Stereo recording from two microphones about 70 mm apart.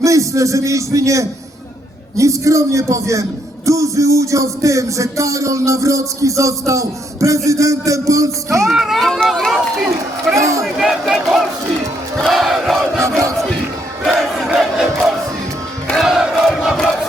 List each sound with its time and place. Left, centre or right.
0.0 s a man's voice: right
2.1 s music: right
8.7 s speech: centre
9.0 s run: centre
10.2 s speech: right
10.6 s speech: centre
12.2 s crowd: centre
14.2 s crowd: centre
16.0 s crowd: centre